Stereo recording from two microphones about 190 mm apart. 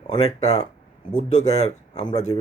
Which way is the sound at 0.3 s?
35° left (ahead or behind).